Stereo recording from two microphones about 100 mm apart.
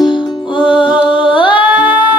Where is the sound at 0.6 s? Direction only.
10° right (ahead or behind).